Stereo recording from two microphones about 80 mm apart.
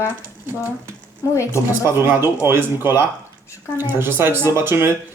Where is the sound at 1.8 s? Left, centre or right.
Right.